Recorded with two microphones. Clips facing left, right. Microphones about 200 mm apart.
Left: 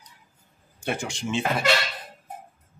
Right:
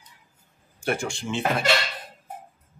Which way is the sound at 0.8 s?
20° left (ahead or behind).